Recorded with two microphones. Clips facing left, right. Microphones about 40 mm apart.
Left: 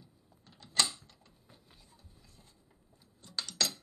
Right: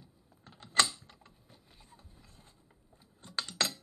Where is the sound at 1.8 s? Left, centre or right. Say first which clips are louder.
Right 3 dB; right.